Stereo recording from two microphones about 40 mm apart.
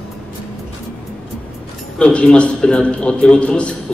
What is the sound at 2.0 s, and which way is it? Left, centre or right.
A man's voice, left.